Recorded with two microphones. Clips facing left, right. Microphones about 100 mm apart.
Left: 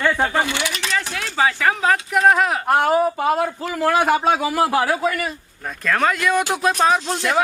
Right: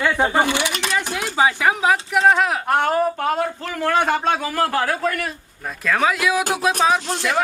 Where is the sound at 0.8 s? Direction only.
15° right (ahead or behind).